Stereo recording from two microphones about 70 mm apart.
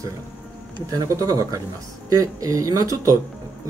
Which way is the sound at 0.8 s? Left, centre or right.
Right.